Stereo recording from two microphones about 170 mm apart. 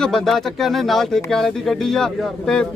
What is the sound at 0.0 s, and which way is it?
Speech, centre (ahead or behind).